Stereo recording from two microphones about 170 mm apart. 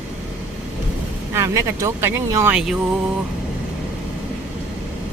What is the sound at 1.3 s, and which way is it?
Speech, 15° right (ahead or behind).